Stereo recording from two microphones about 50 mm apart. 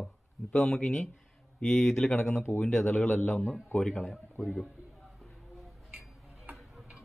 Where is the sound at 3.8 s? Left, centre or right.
Centre.